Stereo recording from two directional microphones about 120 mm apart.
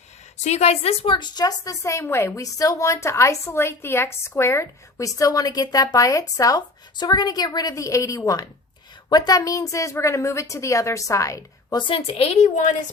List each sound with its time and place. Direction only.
0.3 s a woman's voice: 70° left (ahead or behind)
1.1 s a woman's voice: 35° left (ahead or behind)
11.8 s a woman's voice: 50° left (ahead or behind); by 12.7 s 80° left